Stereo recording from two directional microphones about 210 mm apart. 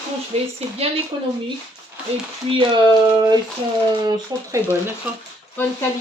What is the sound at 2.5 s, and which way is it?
Speech, 20° right (ahead or behind).